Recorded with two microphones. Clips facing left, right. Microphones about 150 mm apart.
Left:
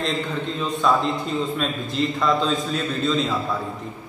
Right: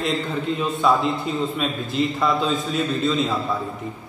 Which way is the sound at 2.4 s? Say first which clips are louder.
Right 1 dB; centre (ahead or behind).